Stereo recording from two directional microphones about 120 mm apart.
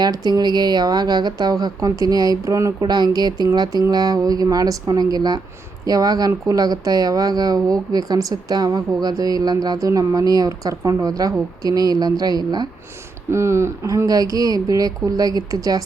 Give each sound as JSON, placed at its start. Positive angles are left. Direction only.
{"t": 0.0, "sound": "speech", "side_deg": -35}
{"t": 13.3, "sound": "speech", "side_deg": -25}